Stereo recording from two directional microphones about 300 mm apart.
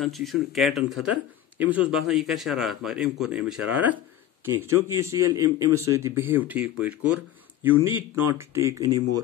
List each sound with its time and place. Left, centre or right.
0.0 s a man's voice: centre
5.0 s a man's voice: centre